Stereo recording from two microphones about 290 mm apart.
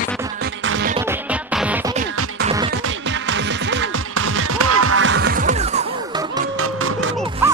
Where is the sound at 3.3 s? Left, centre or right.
Right.